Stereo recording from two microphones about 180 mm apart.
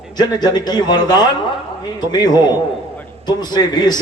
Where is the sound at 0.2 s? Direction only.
25° left (ahead or behind).